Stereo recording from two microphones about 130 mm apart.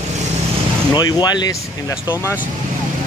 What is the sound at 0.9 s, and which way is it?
Speech, 35° left (ahead or behind).